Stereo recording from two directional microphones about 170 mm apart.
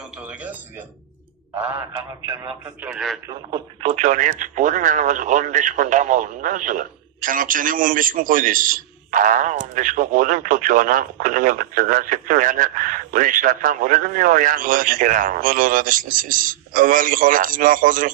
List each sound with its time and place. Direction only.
0.2 s a sound: 5° right (ahead or behind)
1.9 s speech: 25° right (ahead or behind)
2.8 s speech: centre (ahead or behind)
3.2 s speech: 25° right (ahead or behind)
3.8 s speech: 45° right (ahead or behind)